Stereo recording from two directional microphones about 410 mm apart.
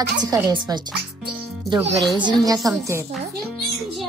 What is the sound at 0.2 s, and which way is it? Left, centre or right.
Speech, centre.